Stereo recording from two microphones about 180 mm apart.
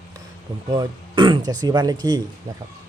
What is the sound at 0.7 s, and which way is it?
Speech, 25° right (ahead or behind).